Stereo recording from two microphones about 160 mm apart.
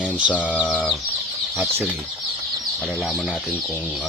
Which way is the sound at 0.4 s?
5° right (ahead or behind).